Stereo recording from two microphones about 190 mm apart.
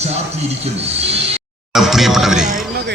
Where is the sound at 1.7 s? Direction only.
Centre (ahead or behind).